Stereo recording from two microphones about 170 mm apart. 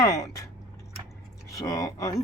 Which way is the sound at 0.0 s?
20° left (ahead or behind).